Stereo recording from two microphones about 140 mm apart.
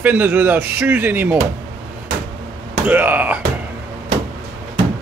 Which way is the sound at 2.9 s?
15° right (ahead or behind).